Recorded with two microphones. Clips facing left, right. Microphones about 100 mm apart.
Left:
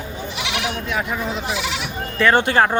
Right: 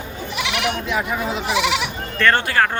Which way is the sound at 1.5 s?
85° right.